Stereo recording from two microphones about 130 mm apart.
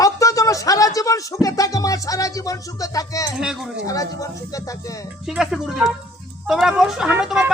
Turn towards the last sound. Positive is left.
turn(degrees=-5)  # may be behind; listen again after turning